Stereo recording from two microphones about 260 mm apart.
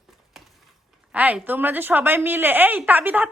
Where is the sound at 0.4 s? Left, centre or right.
Centre.